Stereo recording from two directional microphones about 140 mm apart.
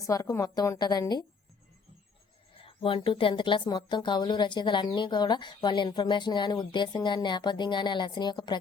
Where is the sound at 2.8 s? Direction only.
40° left (ahead or behind).